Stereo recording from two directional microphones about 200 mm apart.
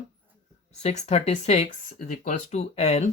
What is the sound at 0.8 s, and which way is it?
Speech, 30° left (ahead or behind).